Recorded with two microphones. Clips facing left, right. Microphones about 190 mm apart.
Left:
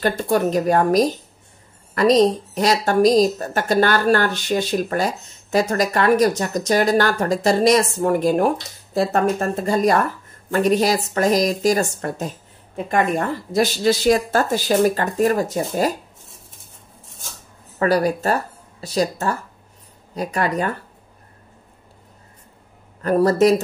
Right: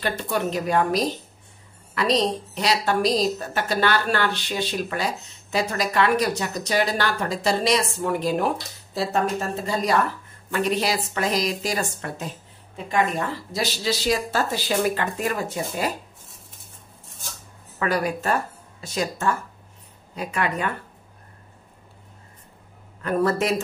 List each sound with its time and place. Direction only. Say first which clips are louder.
0.2 s a woman's voice: left 7 dB; 45° left (ahead or behind)
17.7 s speech: left 6 dB; 35° left (ahead or behind)
23.0 s speech: left 5 dB; 40° left (ahead or behind)